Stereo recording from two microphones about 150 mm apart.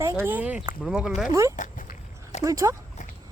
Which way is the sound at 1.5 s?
60° left (ahead or behind).